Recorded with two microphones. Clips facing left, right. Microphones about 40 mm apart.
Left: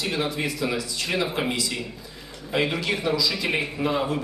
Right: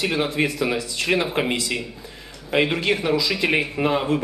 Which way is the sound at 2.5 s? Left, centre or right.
Right.